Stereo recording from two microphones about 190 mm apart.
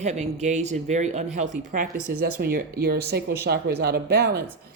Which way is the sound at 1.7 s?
50° right (ahead or behind).